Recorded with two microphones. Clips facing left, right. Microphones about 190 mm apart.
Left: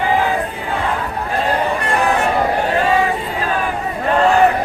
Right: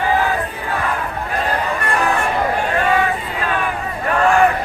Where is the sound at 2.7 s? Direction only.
30° left (ahead or behind).